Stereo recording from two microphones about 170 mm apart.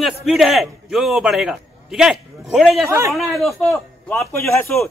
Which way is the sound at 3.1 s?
Centre (ahead or behind).